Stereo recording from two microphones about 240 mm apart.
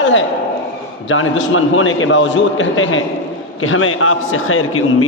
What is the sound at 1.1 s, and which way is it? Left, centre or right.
A man's voice, left.